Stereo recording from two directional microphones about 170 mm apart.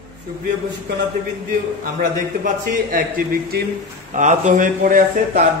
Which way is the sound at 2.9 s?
60° right (ahead or behind).